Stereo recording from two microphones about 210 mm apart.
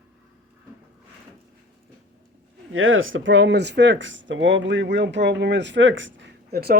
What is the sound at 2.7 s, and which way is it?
Speech, 70° right (ahead or behind).